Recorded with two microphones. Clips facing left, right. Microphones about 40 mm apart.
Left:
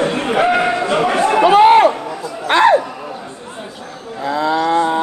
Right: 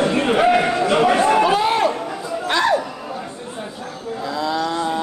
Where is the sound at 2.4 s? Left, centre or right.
Left.